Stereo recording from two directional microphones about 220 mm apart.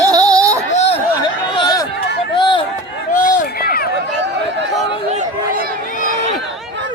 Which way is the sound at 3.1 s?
40° left (ahead or behind).